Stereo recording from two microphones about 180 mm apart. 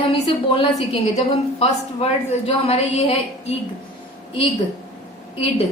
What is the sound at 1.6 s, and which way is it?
A woman's voice, 35° left (ahead or behind).